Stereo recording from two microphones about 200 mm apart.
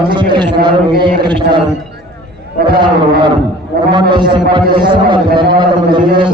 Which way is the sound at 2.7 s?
25° right (ahead or behind).